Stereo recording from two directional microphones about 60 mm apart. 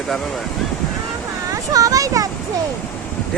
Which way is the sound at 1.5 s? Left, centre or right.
Right.